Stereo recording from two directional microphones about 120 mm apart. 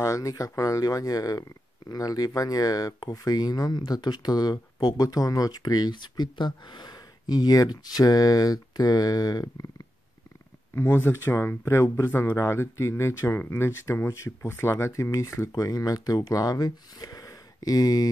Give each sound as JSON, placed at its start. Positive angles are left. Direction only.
{"t": 0.0, "sound": "speech", "side_deg": 25}
{"t": 10.7, "sound": "speech", "side_deg": 20}